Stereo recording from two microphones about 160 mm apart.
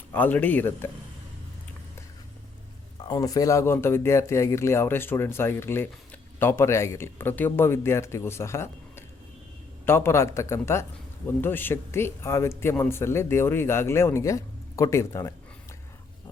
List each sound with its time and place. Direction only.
0.1 s speech: 10° left (ahead or behind)
3.1 s speech: 20° left (ahead or behind)